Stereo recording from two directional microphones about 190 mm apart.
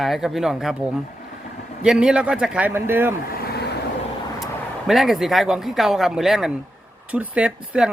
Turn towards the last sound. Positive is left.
turn(degrees=-5)  # may be behind; listen again after turning